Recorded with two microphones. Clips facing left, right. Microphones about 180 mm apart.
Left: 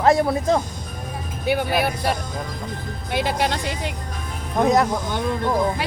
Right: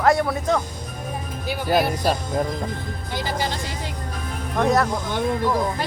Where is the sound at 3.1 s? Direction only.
65° left (ahead or behind).